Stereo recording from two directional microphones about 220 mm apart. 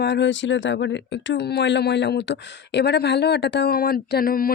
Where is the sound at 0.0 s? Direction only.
50° left (ahead or behind).